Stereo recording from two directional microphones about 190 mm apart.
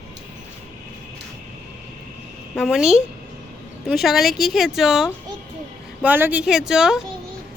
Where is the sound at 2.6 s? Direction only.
5° right (ahead or behind).